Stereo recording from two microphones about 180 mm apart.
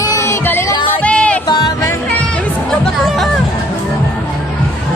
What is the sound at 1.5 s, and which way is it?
Music, 25° left (ahead or behind).